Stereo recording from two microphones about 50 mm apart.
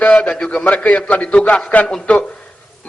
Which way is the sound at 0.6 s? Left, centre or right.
Left.